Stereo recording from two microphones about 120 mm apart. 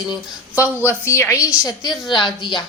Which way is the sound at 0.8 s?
20° left (ahead or behind).